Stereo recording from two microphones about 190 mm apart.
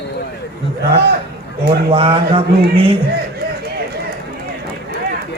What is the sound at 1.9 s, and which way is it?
Speech, 30° right (ahead or behind).